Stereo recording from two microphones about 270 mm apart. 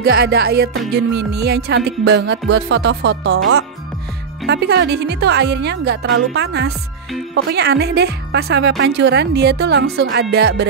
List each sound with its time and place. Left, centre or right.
0.0 s speech: right